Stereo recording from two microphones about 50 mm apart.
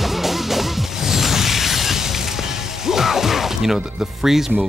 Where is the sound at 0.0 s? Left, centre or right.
Centre.